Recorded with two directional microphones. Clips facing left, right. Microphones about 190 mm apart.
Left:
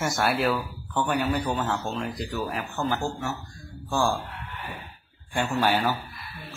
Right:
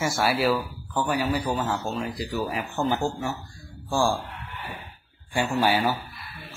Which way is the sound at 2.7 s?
15° right (ahead or behind).